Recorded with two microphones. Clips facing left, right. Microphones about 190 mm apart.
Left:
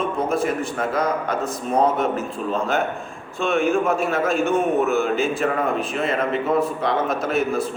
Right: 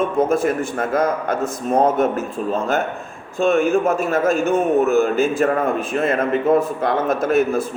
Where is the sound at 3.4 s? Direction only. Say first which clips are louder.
Right 4 dB; 45° right (ahead or behind).